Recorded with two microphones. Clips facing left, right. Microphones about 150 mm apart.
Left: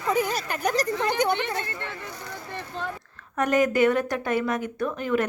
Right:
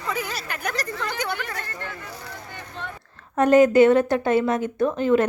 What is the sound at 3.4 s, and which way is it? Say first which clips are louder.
Speech: right 6 dB; 30° right (ahead or behind).